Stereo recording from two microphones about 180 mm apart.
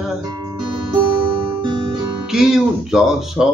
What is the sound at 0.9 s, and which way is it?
Guitar, 25° right (ahead or behind).